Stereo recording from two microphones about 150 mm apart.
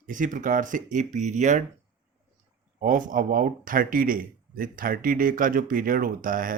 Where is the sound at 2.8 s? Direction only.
60° right (ahead or behind).